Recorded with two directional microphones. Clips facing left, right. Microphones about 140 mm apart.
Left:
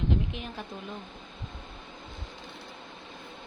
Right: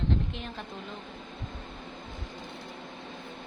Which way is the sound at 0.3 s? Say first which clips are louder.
Left 1 dB; 5° left (ahead or behind).